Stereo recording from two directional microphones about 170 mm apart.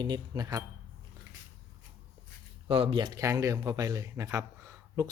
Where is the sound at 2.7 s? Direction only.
30° right (ahead or behind).